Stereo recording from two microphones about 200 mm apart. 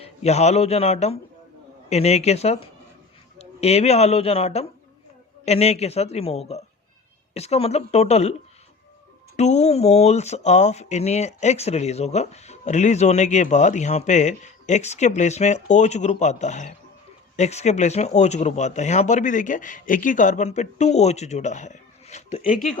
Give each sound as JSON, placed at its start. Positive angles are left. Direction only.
{"t": 0.0, "sound": "speech", "side_deg": 30}